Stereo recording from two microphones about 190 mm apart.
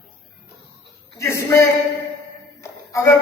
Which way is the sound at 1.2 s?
15° left (ahead or behind).